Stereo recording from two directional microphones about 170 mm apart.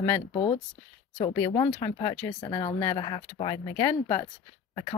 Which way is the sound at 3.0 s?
30° left (ahead or behind).